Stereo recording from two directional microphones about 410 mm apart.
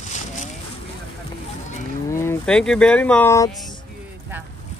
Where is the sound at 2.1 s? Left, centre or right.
Centre.